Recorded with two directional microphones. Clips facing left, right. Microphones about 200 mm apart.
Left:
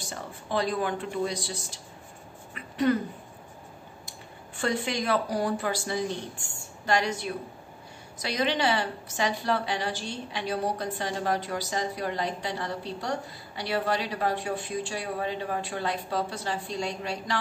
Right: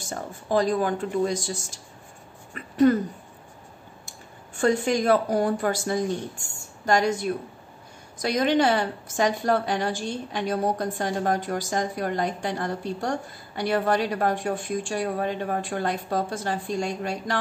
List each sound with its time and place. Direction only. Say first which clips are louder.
0.0 s speech: right 4 dB; 45° right (ahead or behind)
2.5 s a sound: right 6 dB; 45° right (ahead or behind)
4.6 s a woman's voice: right 7 dB; 45° right (ahead or behind)